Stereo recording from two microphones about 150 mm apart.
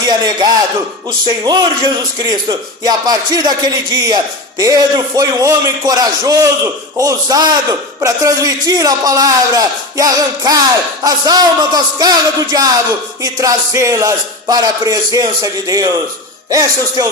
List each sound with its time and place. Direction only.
0.0 s speech: 30° right (ahead or behind)
1.5 s a man's voice: 25° right (ahead or behind)